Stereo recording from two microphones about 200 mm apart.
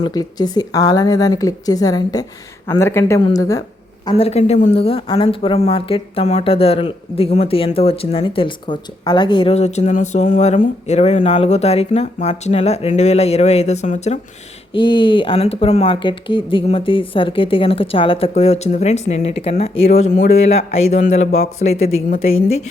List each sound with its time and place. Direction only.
0.0 s speech: 20° left (ahead or behind)
4.1 s speech: 30° left (ahead or behind)
14.7 s speech: 25° left (ahead or behind)